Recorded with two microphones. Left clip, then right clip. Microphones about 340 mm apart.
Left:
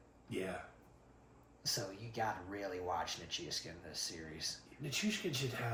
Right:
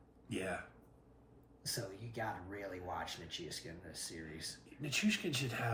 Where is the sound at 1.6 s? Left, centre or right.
Centre.